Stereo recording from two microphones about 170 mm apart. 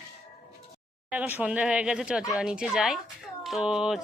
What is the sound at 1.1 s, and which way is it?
Speech, 10° right (ahead or behind).